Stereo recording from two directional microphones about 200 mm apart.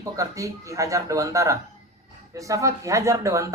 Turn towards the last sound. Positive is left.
turn(degrees=-15)  # may be behind; listen again after turning